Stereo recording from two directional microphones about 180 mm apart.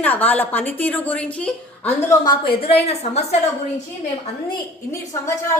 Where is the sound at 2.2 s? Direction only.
25° left (ahead or behind).